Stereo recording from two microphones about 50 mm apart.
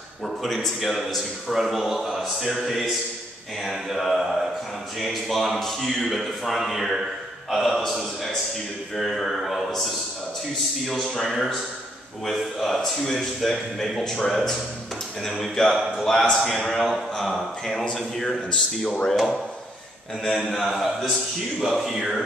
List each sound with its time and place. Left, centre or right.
0.7 s a man's voice: centre
18.5 s speech: left
19.0 s a man's voice: centre